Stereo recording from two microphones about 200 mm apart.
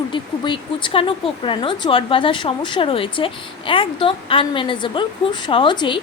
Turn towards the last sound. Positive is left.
turn(degrees=25)  # may be behind; listen again after turning